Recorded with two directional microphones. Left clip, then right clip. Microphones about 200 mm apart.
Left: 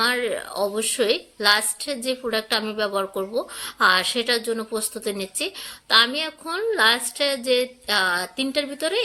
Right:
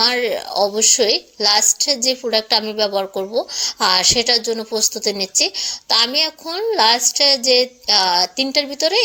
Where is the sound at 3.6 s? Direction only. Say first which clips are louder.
Right 3 dB; 20° right (ahead or behind).